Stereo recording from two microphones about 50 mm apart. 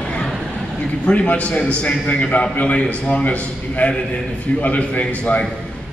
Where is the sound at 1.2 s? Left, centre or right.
Left.